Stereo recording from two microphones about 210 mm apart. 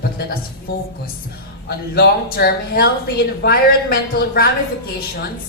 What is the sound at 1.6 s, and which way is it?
A woman's voice, 50° left (ahead or behind).